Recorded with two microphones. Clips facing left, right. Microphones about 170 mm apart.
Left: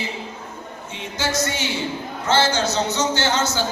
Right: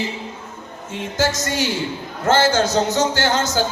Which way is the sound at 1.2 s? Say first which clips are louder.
Right 3 dB; 45° right (ahead or behind).